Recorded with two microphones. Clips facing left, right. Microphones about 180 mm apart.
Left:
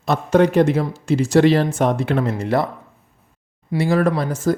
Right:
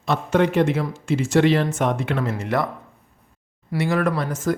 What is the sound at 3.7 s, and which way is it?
Speech, 30° left (ahead or behind).